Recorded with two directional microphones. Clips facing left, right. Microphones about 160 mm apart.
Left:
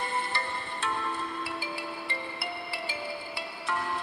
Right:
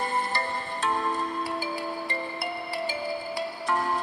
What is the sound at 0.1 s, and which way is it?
Music, 40° right (ahead or behind).